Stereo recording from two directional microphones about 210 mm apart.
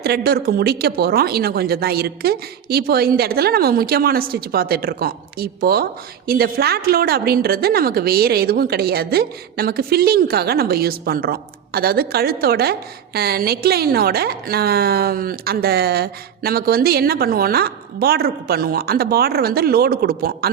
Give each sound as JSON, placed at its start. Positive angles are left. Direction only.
{"t": 0.0, "sound": "speech", "side_deg": -50}